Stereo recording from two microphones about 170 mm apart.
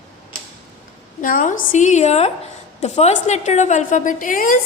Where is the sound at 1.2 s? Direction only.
50° left (ahead or behind).